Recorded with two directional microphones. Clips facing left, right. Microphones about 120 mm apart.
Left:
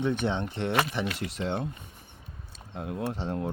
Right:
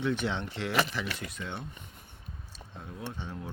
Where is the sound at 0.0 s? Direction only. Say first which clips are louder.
Left 3 dB; 20° left (ahead or behind).